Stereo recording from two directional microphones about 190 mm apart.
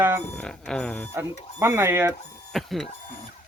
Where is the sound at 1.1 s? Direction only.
15° right (ahead or behind).